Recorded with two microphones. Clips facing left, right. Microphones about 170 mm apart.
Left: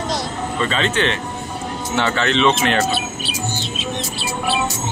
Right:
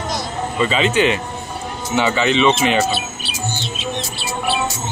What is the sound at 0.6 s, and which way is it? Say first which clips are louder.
Speech: right 4 dB; 5° right (ahead or behind).